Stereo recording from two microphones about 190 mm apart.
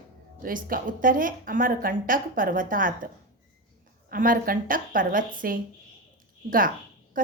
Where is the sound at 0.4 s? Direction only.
45° right (ahead or behind).